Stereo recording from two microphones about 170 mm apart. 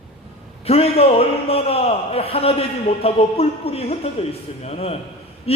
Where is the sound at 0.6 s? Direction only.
35° left (ahead or behind).